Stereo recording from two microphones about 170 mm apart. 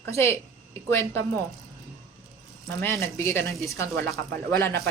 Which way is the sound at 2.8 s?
15° left (ahead or behind).